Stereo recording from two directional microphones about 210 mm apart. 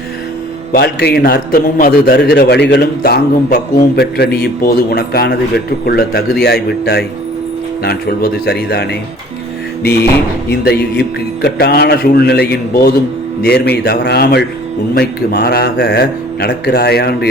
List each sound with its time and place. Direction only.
0.7 s a man's voice: 50° left (ahead or behind)